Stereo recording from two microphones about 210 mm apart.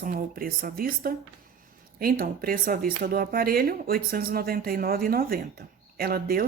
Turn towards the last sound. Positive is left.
turn(degrees=-45)  # may be behind; listen again after turning